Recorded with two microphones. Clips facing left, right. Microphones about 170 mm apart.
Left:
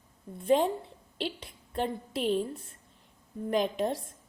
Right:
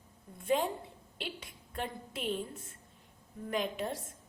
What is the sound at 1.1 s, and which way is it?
A woman's voice, 35° left (ahead or behind).